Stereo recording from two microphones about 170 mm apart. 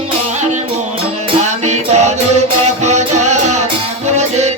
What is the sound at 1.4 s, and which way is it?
Music, 45° right (ahead or behind).